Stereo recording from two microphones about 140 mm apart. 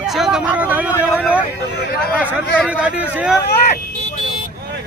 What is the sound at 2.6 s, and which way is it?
Speech, 10° right (ahead or behind).